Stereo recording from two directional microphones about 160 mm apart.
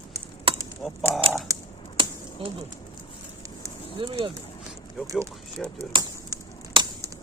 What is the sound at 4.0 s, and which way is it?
Speech, 35° right (ahead or behind).